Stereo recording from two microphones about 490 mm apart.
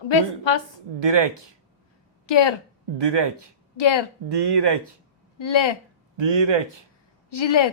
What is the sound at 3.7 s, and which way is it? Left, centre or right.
Speech, left.